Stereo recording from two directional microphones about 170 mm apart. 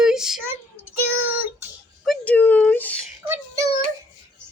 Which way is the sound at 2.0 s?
10° left (ahead or behind).